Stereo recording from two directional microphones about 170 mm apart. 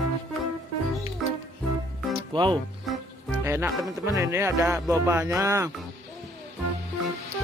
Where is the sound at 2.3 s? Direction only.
30° right (ahead or behind).